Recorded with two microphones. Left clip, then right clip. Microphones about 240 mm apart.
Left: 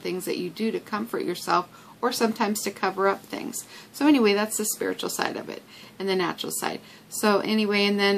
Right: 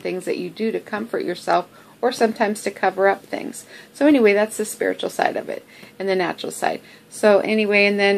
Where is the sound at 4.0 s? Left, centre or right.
Left.